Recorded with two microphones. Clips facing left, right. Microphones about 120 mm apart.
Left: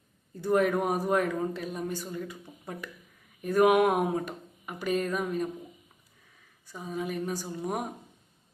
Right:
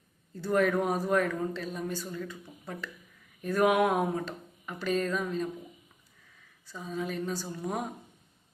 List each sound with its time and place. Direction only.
0.3 s a man's voice: 15° left (ahead or behind)
6.7 s a man's voice: 15° left (ahead or behind)